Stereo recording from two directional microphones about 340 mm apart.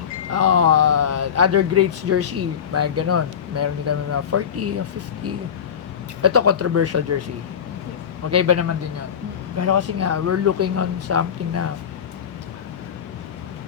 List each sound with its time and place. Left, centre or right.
0.3 s speech: right
6.2 s speech: right
8.3 s speech: right